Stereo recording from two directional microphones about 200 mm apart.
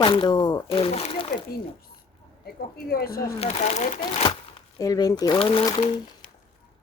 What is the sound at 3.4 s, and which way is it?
Speech, 30° left (ahead or behind).